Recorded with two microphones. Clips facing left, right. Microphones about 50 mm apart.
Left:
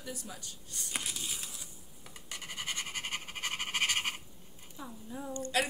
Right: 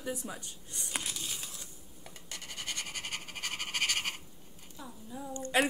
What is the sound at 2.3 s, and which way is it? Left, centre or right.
Frog, centre.